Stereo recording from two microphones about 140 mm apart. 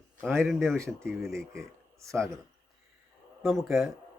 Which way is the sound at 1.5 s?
20° right (ahead or behind).